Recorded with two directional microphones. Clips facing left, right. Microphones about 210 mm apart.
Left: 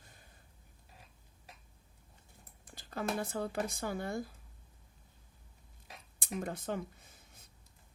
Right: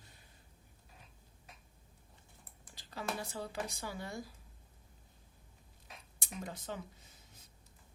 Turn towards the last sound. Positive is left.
turn(degrees=55)  # may be behind; listen again after turning